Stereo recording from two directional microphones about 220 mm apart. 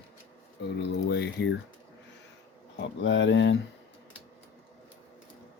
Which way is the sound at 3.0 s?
55° left (ahead or behind).